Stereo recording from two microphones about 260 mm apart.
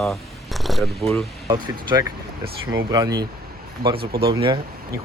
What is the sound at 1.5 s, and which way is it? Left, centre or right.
Speech, centre.